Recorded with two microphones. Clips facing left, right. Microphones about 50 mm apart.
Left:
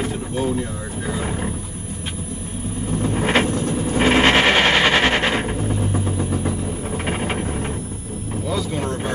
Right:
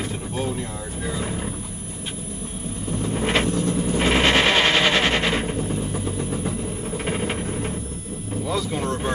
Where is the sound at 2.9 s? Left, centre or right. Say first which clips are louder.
Left 3 dB; left.